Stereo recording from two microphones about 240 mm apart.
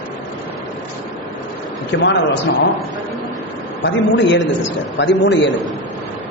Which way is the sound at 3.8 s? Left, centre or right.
Left.